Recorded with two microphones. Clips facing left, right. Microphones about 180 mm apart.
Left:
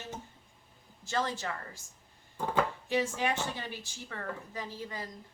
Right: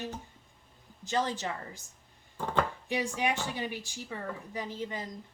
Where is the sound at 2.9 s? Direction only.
15° right (ahead or behind).